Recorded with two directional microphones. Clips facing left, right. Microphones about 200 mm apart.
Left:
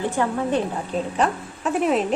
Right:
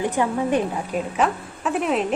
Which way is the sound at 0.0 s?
15° right (ahead or behind).